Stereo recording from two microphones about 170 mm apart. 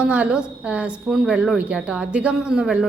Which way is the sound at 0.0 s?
5° right (ahead or behind).